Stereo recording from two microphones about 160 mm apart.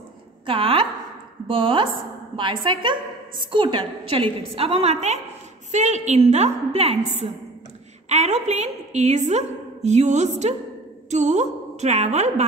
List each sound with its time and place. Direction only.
0.5 s a woman's voice: 35° right (ahead or behind)
8.1 s a woman's voice: 45° right (ahead or behind)